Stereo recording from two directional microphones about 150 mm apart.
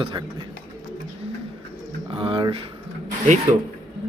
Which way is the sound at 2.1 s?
35° right (ahead or behind).